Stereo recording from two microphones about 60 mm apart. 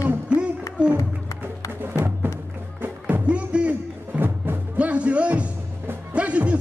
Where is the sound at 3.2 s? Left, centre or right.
Centre.